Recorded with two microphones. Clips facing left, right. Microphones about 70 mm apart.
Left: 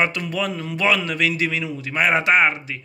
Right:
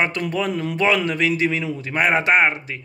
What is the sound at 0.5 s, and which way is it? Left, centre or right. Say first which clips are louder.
Speech: right 4 dB; right.